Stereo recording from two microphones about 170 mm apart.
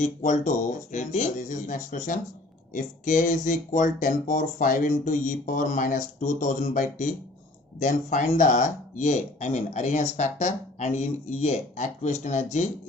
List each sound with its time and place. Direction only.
0.2 s speech: 45° left (ahead or behind)